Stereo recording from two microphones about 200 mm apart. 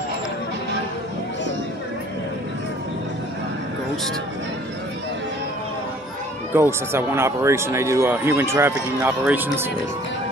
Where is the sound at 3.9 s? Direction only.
Centre (ahead or behind).